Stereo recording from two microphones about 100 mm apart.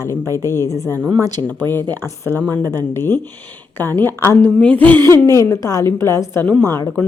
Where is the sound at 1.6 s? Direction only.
45° right (ahead or behind).